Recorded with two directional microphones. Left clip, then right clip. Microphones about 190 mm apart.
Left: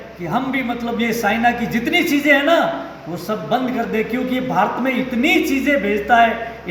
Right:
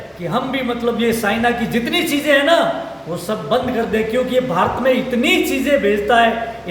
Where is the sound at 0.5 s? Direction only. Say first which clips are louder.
Right 3 dB; 20° right (ahead or behind).